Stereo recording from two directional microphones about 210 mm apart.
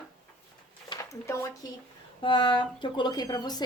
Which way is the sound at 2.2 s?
25° left (ahead or behind).